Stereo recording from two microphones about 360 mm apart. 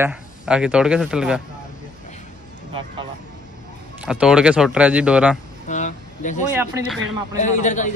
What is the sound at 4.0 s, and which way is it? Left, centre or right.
A man's voice, centre.